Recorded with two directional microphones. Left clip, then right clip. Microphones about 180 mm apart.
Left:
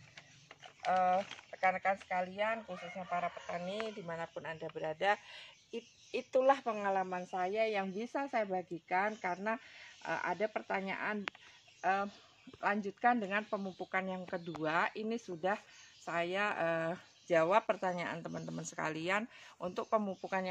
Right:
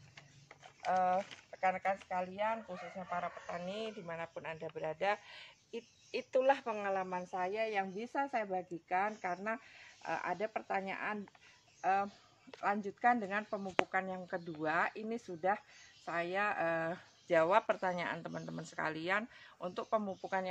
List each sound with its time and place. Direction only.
0.8 s speech: 45° left (ahead or behind)